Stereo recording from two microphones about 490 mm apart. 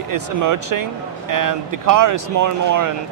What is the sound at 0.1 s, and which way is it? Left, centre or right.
Speech, right.